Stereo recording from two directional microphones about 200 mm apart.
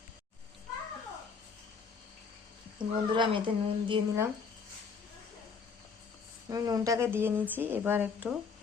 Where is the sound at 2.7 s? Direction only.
25° right (ahead or behind).